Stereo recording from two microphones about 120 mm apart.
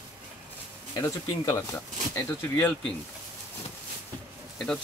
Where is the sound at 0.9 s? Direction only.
25° left (ahead or behind).